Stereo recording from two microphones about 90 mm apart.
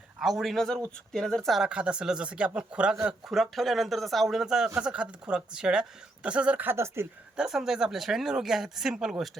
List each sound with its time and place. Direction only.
0.2 s speech: centre (ahead or behind); by 7.1 s 30° right (ahead or behind)
7.3 s speech: 5° right (ahead or behind)